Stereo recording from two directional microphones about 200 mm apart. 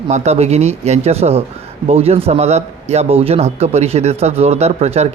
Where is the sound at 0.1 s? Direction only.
35° right (ahead or behind).